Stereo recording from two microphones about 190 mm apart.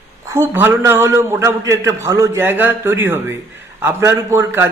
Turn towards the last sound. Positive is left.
turn(degrees=-15)  # may be behind; listen again after turning